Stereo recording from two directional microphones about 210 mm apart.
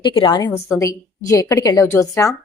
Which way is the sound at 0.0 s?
25° left (ahead or behind).